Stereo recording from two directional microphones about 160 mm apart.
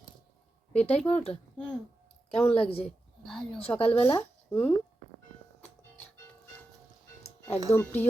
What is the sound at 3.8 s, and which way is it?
Speech, 40° left (ahead or behind).